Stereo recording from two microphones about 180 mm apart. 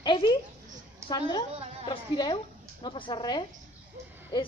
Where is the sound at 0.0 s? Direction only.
25° left (ahead or behind).